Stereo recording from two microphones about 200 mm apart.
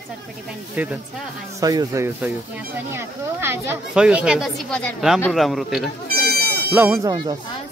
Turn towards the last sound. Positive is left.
turn(degrees=-20)  # may be behind; listen again after turning